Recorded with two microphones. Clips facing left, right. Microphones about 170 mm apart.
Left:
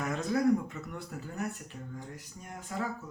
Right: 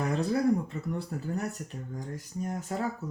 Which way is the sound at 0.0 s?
30° right (ahead or behind).